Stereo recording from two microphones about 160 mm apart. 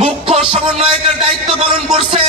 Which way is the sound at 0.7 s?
45° right (ahead or behind).